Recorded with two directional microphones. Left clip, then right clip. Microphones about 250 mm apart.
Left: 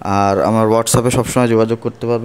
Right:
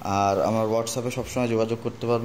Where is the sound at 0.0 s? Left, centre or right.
Left.